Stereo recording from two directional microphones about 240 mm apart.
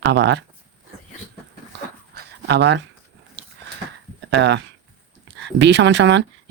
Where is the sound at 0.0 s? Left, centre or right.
Right.